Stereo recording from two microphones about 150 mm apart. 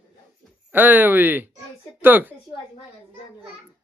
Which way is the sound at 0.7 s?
15° right (ahead or behind).